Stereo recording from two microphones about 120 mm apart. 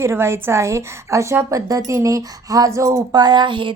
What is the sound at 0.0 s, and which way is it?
A woman's voice, 20° right (ahead or behind).